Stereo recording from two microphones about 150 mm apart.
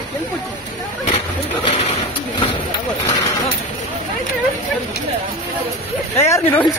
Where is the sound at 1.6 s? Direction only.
40° left (ahead or behind).